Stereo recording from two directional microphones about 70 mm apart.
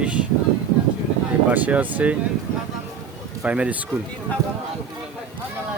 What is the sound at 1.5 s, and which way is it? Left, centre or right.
Speech, right.